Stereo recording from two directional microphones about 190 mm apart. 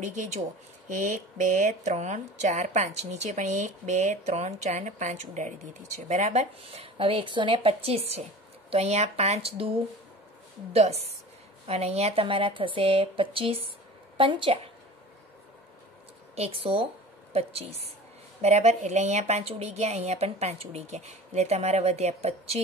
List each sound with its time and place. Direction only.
0.0 s speech: 40° right (ahead or behind)
10.7 s speech: 35° right (ahead or behind)
16.3 s a woman's voice: 30° right (ahead or behind)